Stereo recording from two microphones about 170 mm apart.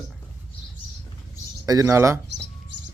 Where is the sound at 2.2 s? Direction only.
90° right.